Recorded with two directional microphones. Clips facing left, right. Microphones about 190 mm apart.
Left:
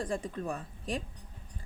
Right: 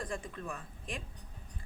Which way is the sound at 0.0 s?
35° left (ahead or behind).